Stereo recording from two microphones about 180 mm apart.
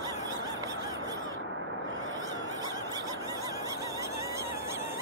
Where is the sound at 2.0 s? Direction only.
90° right.